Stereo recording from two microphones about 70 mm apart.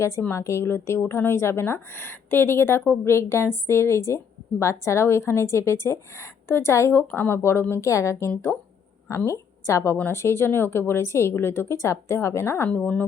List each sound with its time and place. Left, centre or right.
0.3 s a woman's voice: left
12.6 s speech: left